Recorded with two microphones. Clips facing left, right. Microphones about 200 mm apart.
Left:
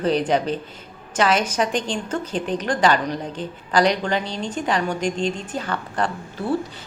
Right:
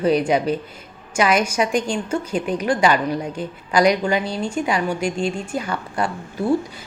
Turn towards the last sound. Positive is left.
turn(degrees=-10)  # may be behind; listen again after turning